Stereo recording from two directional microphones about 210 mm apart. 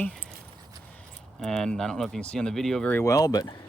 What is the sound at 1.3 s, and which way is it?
Speech, centre (ahead or behind).